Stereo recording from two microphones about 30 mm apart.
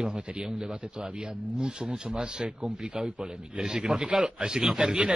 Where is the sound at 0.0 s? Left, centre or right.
Right.